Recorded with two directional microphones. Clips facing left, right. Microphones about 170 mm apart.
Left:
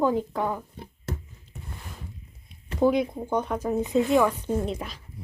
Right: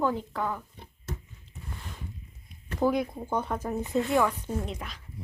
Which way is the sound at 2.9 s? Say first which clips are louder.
Left 4 dB; 20° left (ahead or behind).